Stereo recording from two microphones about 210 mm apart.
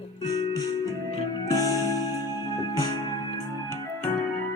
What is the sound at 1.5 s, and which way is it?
Music, 15° left (ahead or behind).